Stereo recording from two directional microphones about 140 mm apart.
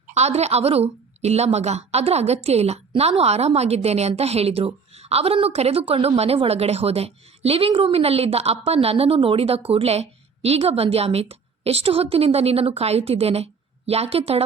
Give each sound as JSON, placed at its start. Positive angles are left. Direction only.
{"t": 0.1, "sound": "a woman's voice", "side_deg": -50}